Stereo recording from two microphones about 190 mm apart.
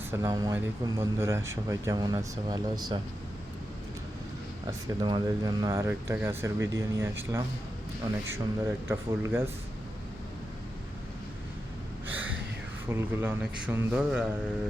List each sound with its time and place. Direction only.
0.1 s speech: 15° right (ahead or behind)
4.6 s speech: 25° right (ahead or behind)
8.6 s speech: 15° right (ahead or behind)
12.1 s gasp: 10° right (ahead or behind)
12.9 s speech: 15° right (ahead or behind)